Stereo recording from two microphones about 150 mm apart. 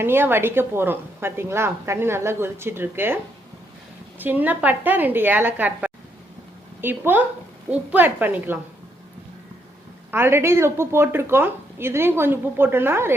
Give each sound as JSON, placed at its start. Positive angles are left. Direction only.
{"t": 0.0, "sound": "a woman's voice", "side_deg": -15}
{"t": 4.2, "sound": "a woman's voice", "side_deg": -10}
{"t": 10.1, "sound": "a woman's voice", "side_deg": -15}